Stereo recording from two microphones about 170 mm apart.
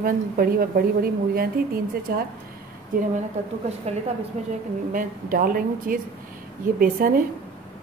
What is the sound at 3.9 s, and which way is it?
Speech, 40° right (ahead or behind).